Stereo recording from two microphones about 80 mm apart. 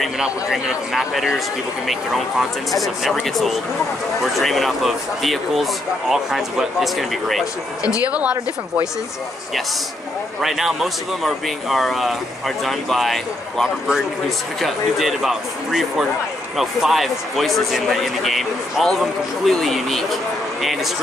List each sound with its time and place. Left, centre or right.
0.0 s a man's voice: centre
2.8 s speech: centre
8.1 s a man's voice: centre
10.4 s speech: centre